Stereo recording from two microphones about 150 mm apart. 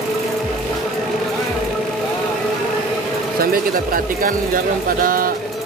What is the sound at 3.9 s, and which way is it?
Speech, 70° right (ahead or behind).